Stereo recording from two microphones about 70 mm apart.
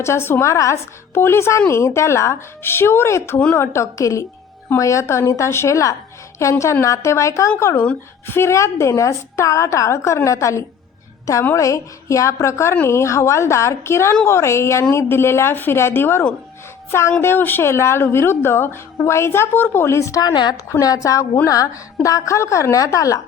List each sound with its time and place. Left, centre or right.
0.0 s a woman's voice: left
0.5 s a woman's voice: left
1.1 s a woman's voice: left
20.2 s a woman's voice: left
20.7 s a woman's voice: left
21.4 s music: left
22.0 s a woman's voice: left